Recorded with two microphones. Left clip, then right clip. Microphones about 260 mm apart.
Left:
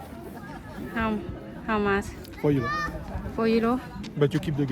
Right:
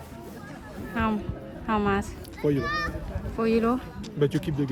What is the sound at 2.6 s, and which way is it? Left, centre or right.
Speech, right.